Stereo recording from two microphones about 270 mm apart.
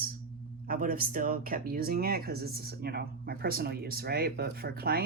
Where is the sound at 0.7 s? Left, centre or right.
Right.